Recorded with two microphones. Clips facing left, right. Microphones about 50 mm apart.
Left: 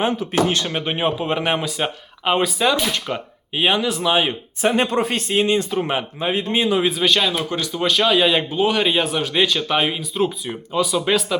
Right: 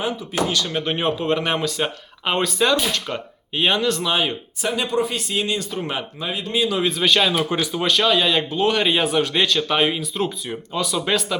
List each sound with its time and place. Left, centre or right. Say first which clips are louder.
0.4 s speech: left 2 dB; left
0.9 s speech: even; centre
4.6 s speech: left 4 dB; left
5.3 s speech: left 5 dB; left
6.9 s speech: even; centre
7.9 s speech: left 2 dB; centre